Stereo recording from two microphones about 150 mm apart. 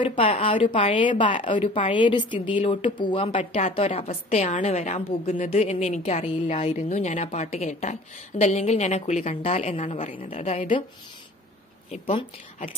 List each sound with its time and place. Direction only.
0.0 s a woman's voice: 35° left (ahead or behind); by 10.1 s 55° left (ahead or behind)
10.1 s a woman's voice: 40° left (ahead or behind)
11.9 s a woman's voice: 40° left (ahead or behind)